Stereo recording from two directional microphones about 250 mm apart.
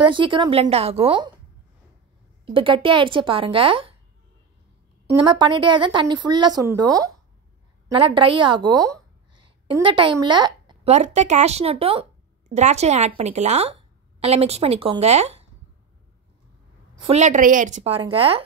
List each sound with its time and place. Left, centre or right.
0.0 s speech: centre
2.5 s speech: right
5.1 s a woman's voice: centre
17.0 s speech: right